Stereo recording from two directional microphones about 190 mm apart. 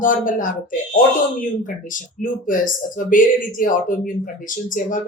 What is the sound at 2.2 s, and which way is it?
Speech, 45° left (ahead or behind).